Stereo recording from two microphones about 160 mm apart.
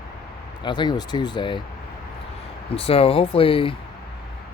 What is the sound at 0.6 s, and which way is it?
Speech, 30° left (ahead or behind).